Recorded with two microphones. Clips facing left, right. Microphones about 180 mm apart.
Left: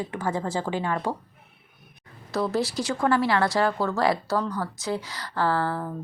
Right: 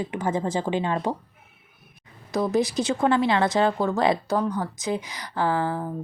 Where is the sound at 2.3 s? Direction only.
20° right (ahead or behind).